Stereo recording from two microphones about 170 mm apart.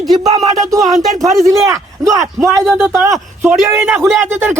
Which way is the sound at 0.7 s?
20° right (ahead or behind).